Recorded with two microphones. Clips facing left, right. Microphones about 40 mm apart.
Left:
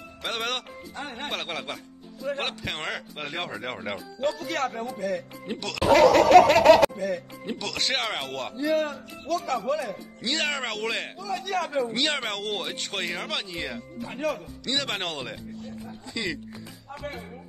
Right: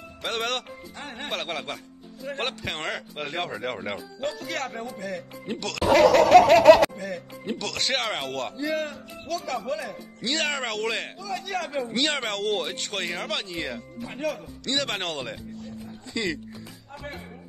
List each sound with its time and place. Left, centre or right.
0.2 s speech: centre
8.5 s speech: left
9.6 s speech: centre
15.8 s a sound: centre